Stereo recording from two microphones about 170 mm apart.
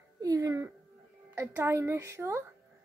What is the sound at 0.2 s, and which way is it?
Music, 20° right (ahead or behind).